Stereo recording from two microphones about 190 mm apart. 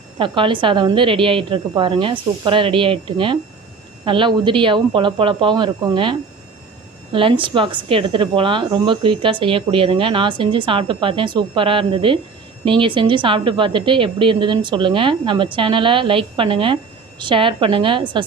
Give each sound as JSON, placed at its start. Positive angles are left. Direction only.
{"t": 0.2, "sound": "speech", "side_deg": -25}